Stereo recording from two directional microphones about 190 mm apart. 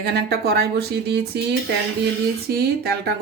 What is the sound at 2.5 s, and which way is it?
Speech, 55° right (ahead or behind).